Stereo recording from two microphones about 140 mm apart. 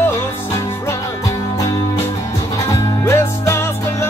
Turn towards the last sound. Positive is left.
turn(degrees=20)  # may be behind; listen again after turning